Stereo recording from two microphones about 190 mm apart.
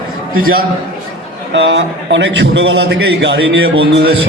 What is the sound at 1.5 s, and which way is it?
A man's voice, 70° right (ahead or behind).